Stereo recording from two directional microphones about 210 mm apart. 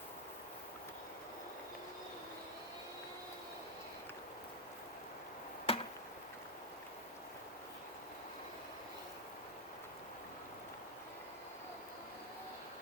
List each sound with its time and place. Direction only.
5.7 s chop: 25° left (ahead or behind)